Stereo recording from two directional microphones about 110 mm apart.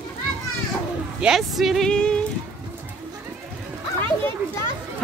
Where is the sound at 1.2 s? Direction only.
Centre (ahead or behind).